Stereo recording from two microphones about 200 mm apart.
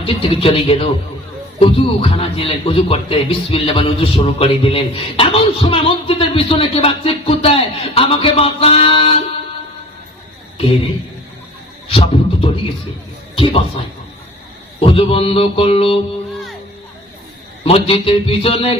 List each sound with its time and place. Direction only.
0.0 s a man's voice: 25° left (ahead or behind)
11.9 s a man's voice: 25° left (ahead or behind)
14.8 s a man's voice: 25° left (ahead or behind)
17.6 s a man's voice: 30° left (ahead or behind)